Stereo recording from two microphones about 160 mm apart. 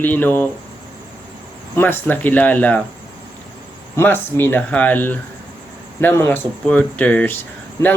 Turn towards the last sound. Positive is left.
turn(degrees=15)  # may be behind; listen again after turning